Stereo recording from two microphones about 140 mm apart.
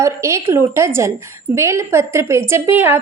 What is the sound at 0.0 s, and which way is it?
A woman's voice, 20° right (ahead or behind).